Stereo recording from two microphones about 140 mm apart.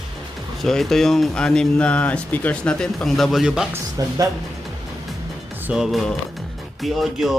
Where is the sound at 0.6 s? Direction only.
Centre (ahead or behind).